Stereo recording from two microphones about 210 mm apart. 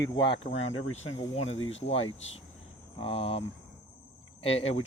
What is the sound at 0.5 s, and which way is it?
Speech, 70° left (ahead or behind).